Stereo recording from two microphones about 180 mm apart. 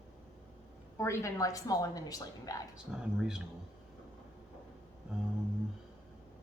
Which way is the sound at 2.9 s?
5° right (ahead or behind).